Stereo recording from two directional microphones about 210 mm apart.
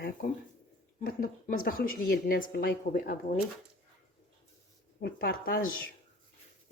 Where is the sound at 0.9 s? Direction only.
45° left (ahead or behind).